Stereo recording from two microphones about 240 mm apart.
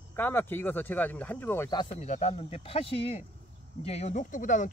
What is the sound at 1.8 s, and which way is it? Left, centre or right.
Speech, left.